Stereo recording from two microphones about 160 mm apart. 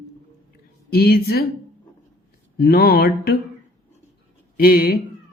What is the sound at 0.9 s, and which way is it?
Mantra, 75° left (ahead or behind).